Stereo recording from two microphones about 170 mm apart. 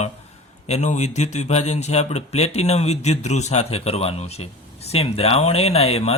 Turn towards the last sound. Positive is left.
turn(degrees=35)  # may be behind; listen again after turning